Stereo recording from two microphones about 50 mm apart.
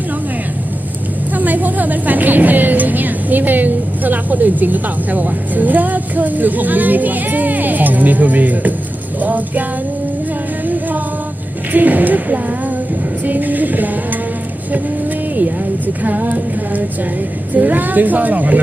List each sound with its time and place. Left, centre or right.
1.4 s vehicle: right
9.2 s music: right
11.7 s a woman's voice: right
13.2 s a sound: right
16.0 s music: right
17.5 s a woman's voice: right